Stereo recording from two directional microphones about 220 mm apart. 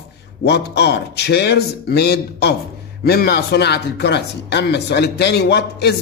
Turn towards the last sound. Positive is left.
turn(degrees=50)  # may be behind; listen again after turning